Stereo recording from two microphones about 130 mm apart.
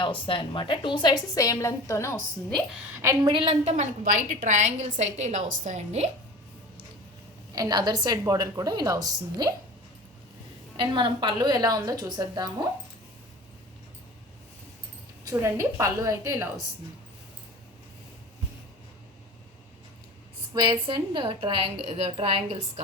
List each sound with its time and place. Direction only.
0.0 s a woman's voice: 40° left (ahead or behind); by 2.2 s 20° left (ahead or behind)
3.0 s a woman's voice: 20° right (ahead or behind)
3.3 s a woman's voice: 50° right (ahead or behind)
7.5 s a woman's voice: 30° right (ahead or behind)
10.8 s a woman's voice: 40° right (ahead or behind)
15.2 s a woman's voice: 25° right (ahead or behind)
20.5 s a woman's voice: 35° right (ahead or behind)